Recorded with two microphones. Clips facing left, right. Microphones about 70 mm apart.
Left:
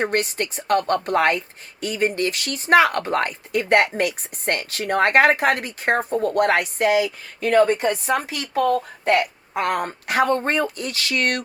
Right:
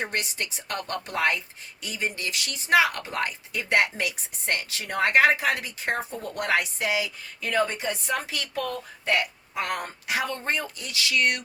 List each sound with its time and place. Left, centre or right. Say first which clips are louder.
0.0 s a woman's voice: left 8 dB; left